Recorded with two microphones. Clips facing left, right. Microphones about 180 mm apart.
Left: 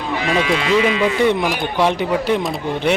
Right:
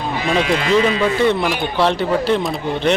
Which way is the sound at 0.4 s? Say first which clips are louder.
Even; 35° right (ahead or behind).